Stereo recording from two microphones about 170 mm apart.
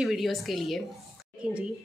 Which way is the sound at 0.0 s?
Centre (ahead or behind).